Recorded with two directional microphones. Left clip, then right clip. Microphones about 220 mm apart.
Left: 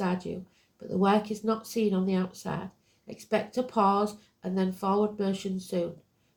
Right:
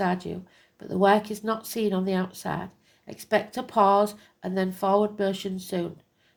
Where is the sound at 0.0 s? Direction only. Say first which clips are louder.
Right 5 dB; 45° right (ahead or behind).